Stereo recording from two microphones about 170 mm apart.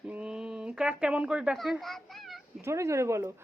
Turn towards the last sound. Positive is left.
turn(degrees=-15)  # may be behind; listen again after turning